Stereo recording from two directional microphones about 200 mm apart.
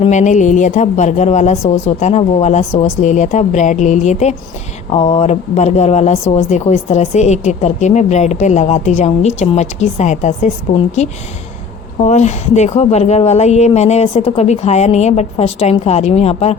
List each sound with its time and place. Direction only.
0.0 s speech: 35° left (ahead or behind)